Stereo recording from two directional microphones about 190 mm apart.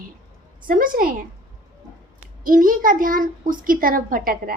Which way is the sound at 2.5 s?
45° right (ahead or behind).